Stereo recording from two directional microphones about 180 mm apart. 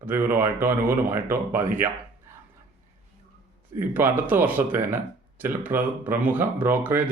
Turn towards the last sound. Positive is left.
turn(degrees=-10)  # may be behind; listen again after turning